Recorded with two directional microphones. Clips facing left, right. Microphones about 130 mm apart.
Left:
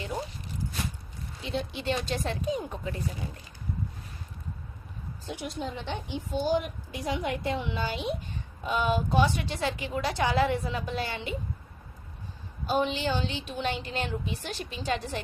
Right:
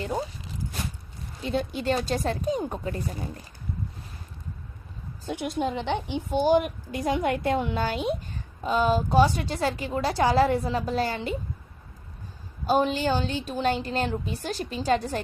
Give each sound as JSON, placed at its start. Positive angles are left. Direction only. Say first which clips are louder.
{"t": 1.4, "sound": "a woman's voice", "louder": "right 5 dB", "side_deg": -45}
{"t": 5.3, "sound": "a woman's voice", "louder": "right 7 dB", "side_deg": -60}
{"t": 8.6, "sound": "a woman's voice", "louder": "right 4 dB", "side_deg": -35}
{"t": 12.6, "sound": "a woman's voice", "louder": "right 4 dB", "side_deg": -40}